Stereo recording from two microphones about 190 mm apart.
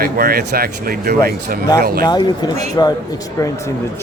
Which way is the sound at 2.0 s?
20° left (ahead or behind).